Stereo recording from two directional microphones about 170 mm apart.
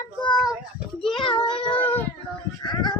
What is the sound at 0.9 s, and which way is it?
Child singing, centre (ahead or behind).